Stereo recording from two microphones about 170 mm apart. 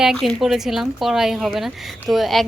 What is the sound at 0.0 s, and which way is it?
Speech, centre (ahead or behind).